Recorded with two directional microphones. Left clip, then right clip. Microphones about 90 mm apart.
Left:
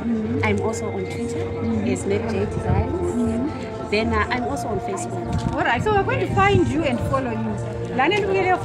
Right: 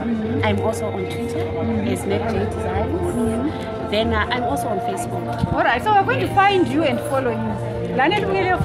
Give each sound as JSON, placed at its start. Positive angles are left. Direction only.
{"t": 0.4, "sound": "speech", "side_deg": -20}
{"t": 3.9, "sound": "a woman's voice", "side_deg": -15}
{"t": 5.6, "sound": "a woman's voice", "side_deg": -30}